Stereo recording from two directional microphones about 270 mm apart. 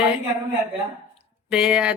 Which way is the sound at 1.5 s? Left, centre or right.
Centre.